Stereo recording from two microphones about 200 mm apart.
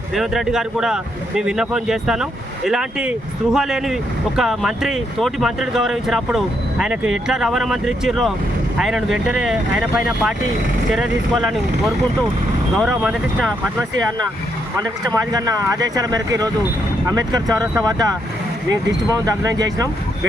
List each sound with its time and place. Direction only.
0.1 s speech: centre (ahead or behind)
12.7 s speech: 5° left (ahead or behind)
15.0 s speech: 20° right (ahead or behind)
19.1 s speech: 15° right (ahead or behind)